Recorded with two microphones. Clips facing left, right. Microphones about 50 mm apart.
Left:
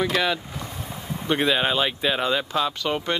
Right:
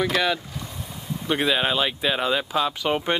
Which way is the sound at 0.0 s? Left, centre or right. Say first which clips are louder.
Even; centre.